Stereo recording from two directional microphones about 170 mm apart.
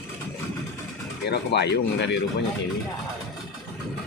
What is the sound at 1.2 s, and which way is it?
Speech, 80° left.